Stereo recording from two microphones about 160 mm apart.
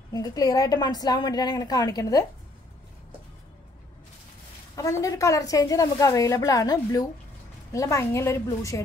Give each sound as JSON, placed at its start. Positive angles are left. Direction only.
{"t": 0.1, "sound": "a woman's voice", "side_deg": 25}
{"t": 4.7, "sound": "a woman's voice", "side_deg": 20}